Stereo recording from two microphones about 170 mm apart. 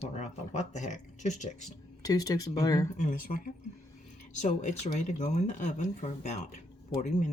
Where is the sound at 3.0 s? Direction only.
50° left (ahead or behind).